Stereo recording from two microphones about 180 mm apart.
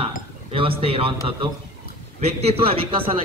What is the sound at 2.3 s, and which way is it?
Speech, 30° right (ahead or behind).